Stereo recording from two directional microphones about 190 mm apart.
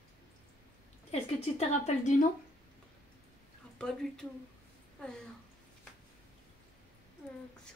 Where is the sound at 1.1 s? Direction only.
35° left (ahead or behind).